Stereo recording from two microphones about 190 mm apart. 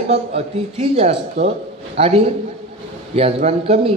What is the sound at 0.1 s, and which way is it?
A man's voice, 30° right (ahead or behind).